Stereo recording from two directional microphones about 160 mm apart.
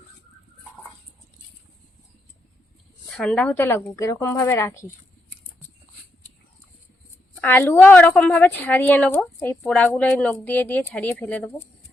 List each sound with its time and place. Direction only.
3.2 s a woman's voice: 5° left (ahead or behind)
7.4 s a woman's voice: 10° left (ahead or behind)